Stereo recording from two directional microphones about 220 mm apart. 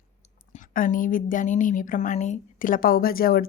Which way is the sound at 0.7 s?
40° left (ahead or behind).